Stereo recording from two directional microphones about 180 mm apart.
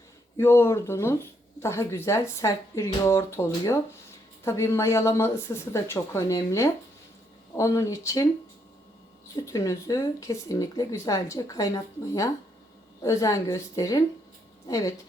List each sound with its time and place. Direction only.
0.3 s speech: 15° left (ahead or behind)
9.3 s speech: 20° left (ahead or behind)